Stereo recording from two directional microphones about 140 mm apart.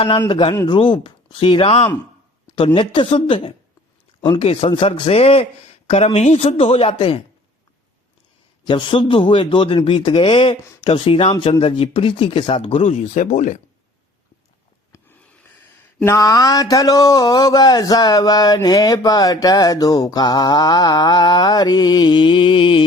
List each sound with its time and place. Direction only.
0.3 s a man's voice: 35° left (ahead or behind)
8.6 s a man's voice: 35° left (ahead or behind); by 13.6 s 60° left (ahead or behind)
16.0 s speech: 25° left (ahead or behind)